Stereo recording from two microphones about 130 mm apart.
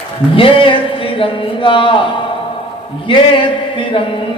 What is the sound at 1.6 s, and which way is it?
Music, 40° left (ahead or behind).